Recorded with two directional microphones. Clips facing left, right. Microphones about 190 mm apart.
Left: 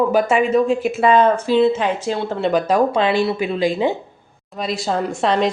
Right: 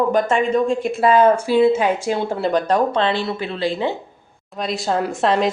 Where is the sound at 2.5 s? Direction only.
5° left (ahead or behind).